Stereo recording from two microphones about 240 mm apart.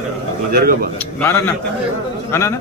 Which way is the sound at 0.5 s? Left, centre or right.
Right.